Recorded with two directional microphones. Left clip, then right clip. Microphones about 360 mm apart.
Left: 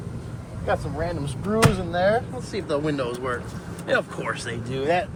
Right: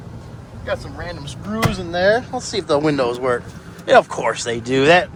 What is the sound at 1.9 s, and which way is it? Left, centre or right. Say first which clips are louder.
Speech: right 5 dB; centre.